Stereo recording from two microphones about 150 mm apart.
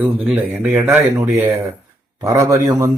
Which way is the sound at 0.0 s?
10° right (ahead or behind).